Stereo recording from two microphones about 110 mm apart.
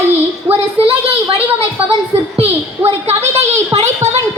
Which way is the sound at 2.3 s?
15° right (ahead or behind).